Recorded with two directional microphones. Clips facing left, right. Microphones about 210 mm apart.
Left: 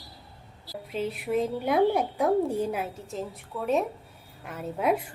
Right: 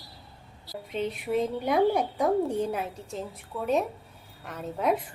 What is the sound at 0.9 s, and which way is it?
A woman's voice, 5° left (ahead or behind).